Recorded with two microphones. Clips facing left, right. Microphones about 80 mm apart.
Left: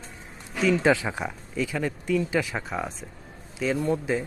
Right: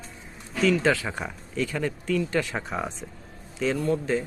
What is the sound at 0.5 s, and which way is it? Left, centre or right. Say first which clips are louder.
Speech: left 1 dB; centre.